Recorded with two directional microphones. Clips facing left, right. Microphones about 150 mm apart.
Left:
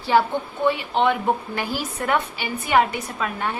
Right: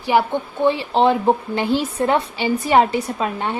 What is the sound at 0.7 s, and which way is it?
A woman's voice, 30° right (ahead or behind).